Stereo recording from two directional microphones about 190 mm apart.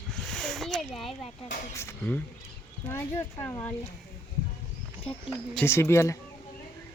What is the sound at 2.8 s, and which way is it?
Speech, 10° left (ahead or behind).